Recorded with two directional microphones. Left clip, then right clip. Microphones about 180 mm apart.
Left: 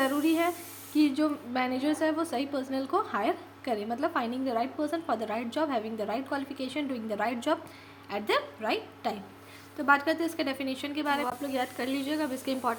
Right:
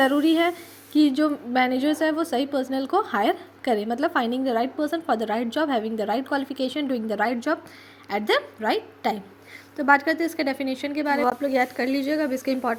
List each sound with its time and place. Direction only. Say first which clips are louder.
0.0 s a woman's voice: right 7 dB; 35° right (ahead or behind)